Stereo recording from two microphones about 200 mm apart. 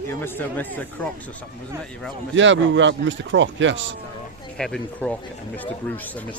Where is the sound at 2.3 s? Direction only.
70° right (ahead or behind).